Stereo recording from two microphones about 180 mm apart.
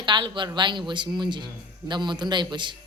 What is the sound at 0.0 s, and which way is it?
A woman's voice, 25° right (ahead or behind).